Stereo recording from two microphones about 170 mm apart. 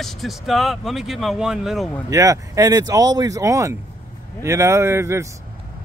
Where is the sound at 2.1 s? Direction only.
20° right (ahead or behind).